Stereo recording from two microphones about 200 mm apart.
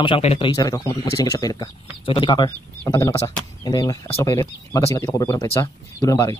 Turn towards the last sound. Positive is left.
turn(degrees=15)  # may be behind; listen again after turning